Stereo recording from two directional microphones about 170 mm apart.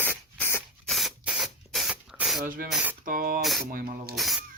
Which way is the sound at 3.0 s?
55° right (ahead or behind).